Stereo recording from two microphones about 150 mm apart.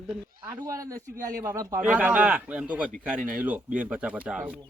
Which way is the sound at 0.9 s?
70° right (ahead or behind).